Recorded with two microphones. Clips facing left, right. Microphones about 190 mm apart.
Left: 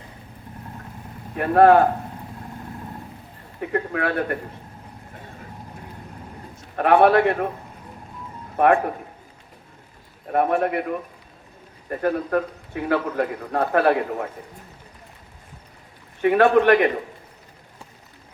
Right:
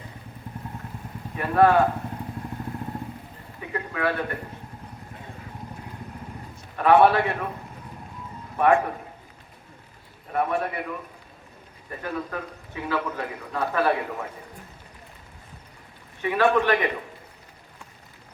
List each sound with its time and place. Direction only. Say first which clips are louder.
1.4 s a man's voice: left 5 dB; 60° left (ahead or behind)
3.6 s a man's voice: left 4 dB; 55° left (ahead or behind)
6.7 s a man's voice: left 2 dB; 55° left (ahead or behind)
8.5 s a man's voice: left 2 dB; 60° left (ahead or behind)
10.3 s a man's voice: left 5 dB; 60° left (ahead or behind)
16.2 s a man's voice: left 6 dB; 60° left (ahead or behind)